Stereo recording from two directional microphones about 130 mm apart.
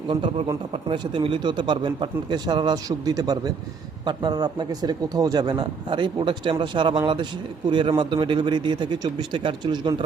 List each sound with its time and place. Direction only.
0.1 s a man's voice: 40° right (ahead or behind)